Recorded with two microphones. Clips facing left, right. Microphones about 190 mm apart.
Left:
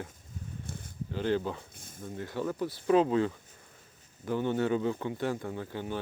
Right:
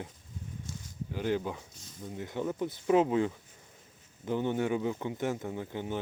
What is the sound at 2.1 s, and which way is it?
Speech, 20° right (ahead or behind).